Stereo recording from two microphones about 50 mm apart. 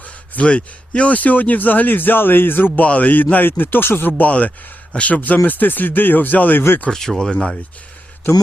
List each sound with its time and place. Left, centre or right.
0.3 s a man's voice: left
2.8 s a man's voice: left
4.2 s a man's voice: left
6.9 s speech: centre
7.3 s speech: left